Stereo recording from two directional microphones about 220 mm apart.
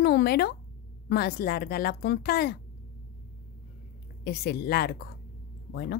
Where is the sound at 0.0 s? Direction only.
45° left (ahead or behind).